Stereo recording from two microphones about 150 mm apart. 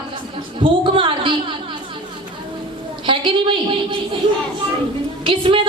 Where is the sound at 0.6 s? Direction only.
35° right (ahead or behind).